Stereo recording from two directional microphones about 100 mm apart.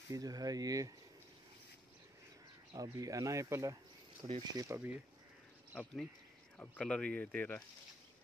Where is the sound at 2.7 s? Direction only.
35° right (ahead or behind).